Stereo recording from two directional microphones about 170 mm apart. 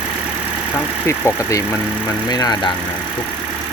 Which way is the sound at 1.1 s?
15° left (ahead or behind).